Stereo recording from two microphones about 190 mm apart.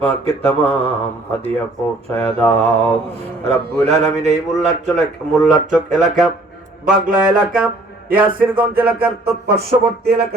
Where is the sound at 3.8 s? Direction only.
35° right (ahead or behind).